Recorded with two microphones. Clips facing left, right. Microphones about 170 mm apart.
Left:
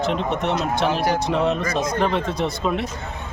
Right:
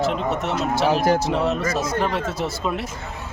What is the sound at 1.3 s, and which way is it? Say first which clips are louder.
Speech: left 1 dB; 5° right (ahead or behind).